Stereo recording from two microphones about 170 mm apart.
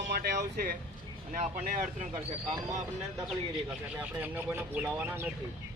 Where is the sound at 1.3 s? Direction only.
50° right (ahead or behind).